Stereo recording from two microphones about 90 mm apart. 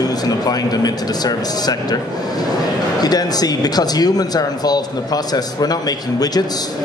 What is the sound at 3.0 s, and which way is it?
A man's voice, 45° left (ahead or behind).